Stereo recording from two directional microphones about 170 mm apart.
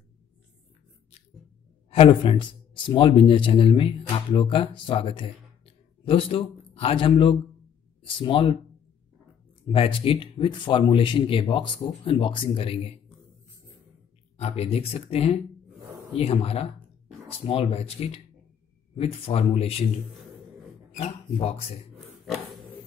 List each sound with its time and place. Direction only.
1.9 s speech: 35° left (ahead or behind)
9.7 s speech: 30° left (ahead or behind)
14.3 s speech: 35° left (ahead or behind)
20.9 s speech: 35° left (ahead or behind)
21.9 s pig: centre (ahead or behind)